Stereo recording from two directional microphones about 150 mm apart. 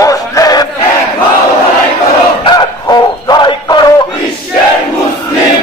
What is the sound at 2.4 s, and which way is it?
Music, 25° left (ahead or behind).